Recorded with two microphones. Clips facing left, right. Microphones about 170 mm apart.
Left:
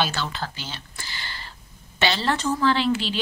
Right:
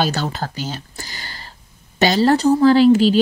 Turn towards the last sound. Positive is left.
turn(degrees=-40)  # may be behind; listen again after turning